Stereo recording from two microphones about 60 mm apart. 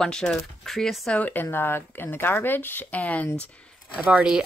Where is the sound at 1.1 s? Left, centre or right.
Left.